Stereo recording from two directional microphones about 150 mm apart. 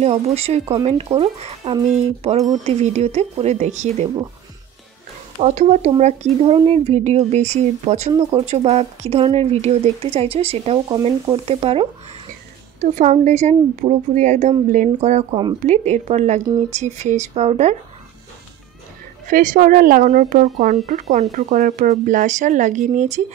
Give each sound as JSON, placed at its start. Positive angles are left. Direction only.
{"t": 0.0, "sound": "speech", "side_deg": -40}
{"t": 5.4, "sound": "speech", "side_deg": -50}
{"t": 8.2, "sound": "speech", "side_deg": -35}
{"t": 12.8, "sound": "speech", "side_deg": -55}
{"t": 19.2, "sound": "speech", "side_deg": -60}
{"t": 20.1, "sound": "speech", "side_deg": -55}